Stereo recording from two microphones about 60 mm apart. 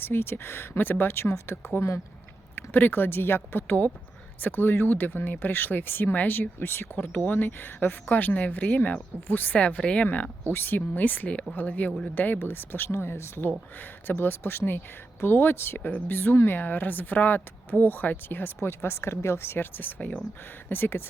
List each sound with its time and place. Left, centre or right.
0.0 s speech: left
6.9 s speech: left
10.5 s speech: left